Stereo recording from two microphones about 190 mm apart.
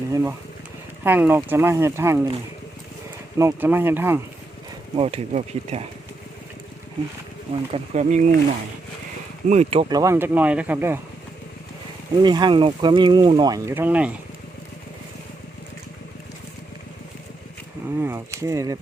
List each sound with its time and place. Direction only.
0.1 s speech: 15° right (ahead or behind)
3.3 s speech: 10° right (ahead or behind)
4.9 s speech: 30° right (ahead or behind)
7.7 s speech: 40° right (ahead or behind)
9.5 s speech: 35° right (ahead or behind)
10.0 s speech: 15° right (ahead or behind)
12.1 s speech: 20° right (ahead or behind)
17.8 s speech: 15° right (ahead or behind)